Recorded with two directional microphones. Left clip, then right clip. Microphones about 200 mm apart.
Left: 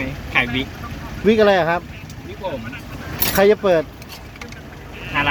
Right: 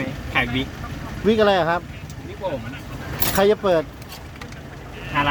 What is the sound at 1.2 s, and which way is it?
Speech, centre (ahead or behind).